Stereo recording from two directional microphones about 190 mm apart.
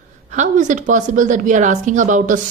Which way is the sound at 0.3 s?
40° right (ahead or behind).